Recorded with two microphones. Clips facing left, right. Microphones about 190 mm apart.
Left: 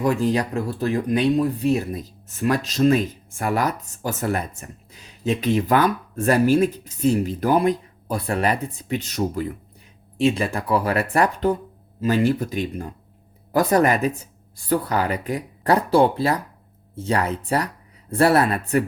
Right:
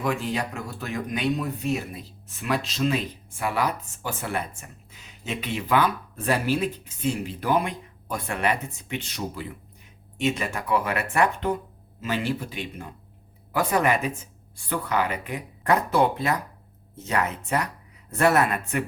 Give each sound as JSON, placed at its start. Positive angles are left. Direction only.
{"t": 0.0, "sound": "speech", "side_deg": 40}
{"t": 10.2, "sound": "speech", "side_deg": 35}